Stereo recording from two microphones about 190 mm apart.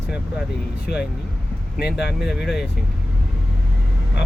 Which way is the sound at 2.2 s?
5° right (ahead or behind).